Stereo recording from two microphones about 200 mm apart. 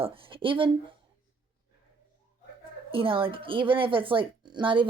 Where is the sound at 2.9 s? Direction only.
25° right (ahead or behind).